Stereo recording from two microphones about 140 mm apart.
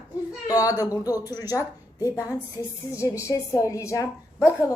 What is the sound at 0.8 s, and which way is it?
Speech, 25° left (ahead or behind).